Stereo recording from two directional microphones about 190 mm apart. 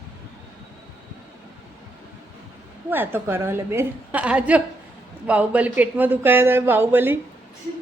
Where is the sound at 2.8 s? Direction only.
10° right (ahead or behind).